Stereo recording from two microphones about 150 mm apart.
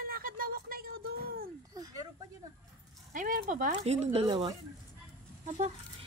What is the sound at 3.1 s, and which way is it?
Speech, 60° right (ahead or behind).